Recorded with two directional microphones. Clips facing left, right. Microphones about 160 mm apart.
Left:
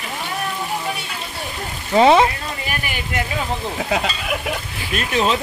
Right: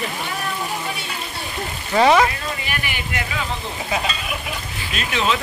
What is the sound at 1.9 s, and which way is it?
Speech, 25° left (ahead or behind).